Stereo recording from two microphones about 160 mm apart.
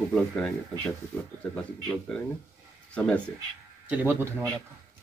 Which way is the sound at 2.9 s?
10° left (ahead or behind).